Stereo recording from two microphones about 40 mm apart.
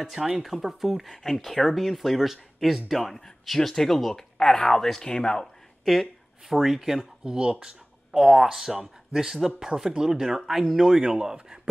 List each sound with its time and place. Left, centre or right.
0.0 s speech: centre
1.0 s speech: centre
5.1 s speech: centre
6.5 s speech: centre
7.2 s speech: right